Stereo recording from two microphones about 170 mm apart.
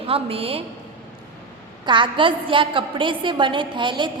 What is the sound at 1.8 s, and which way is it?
A woman's voice, 30° right (ahead or behind).